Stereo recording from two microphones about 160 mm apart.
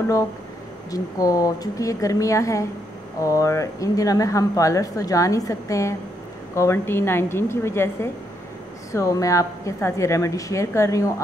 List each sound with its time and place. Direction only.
0.9 s a woman's voice: 20° left (ahead or behind)